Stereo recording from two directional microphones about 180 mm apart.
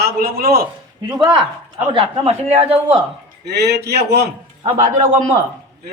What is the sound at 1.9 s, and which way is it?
Speech, 30° right (ahead or behind).